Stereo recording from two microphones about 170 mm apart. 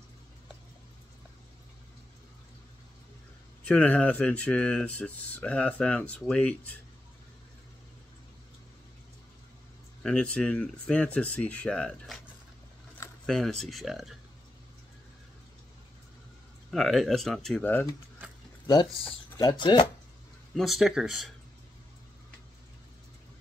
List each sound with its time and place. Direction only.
3.6 s speech: 10° left (ahead or behind)
10.0 s speech: 5° left (ahead or behind)
13.3 s speech: centre (ahead or behind)
16.7 s speech: centre (ahead or behind)
19.3 s speech: 25° left (ahead or behind)
20.5 s speech: centre (ahead or behind)